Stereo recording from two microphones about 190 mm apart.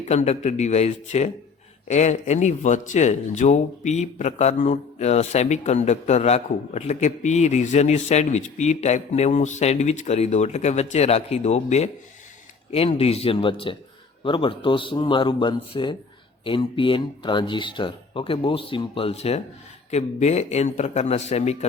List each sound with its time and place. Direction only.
0.0 s speech: 35° left (ahead or behind)